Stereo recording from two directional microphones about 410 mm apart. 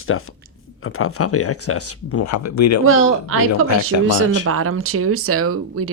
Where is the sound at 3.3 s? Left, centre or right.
Right.